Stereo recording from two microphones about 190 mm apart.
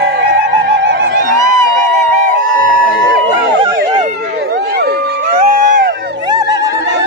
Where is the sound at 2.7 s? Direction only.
65° right (ahead or behind).